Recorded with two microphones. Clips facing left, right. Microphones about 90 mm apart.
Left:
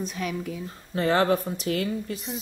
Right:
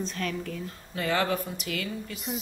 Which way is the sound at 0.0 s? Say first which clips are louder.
Left 2 dB; 10° left (ahead or behind).